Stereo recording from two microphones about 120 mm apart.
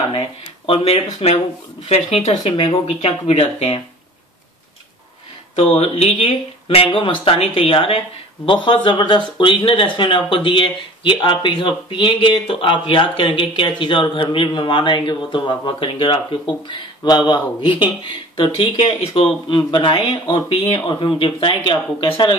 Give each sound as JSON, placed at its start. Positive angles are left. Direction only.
{"t": 0.7, "sound": "speech", "side_deg": 55}
{"t": 5.6, "sound": "speech", "side_deg": 60}